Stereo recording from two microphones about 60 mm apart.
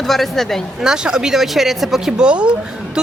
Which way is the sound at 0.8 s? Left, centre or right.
Centre.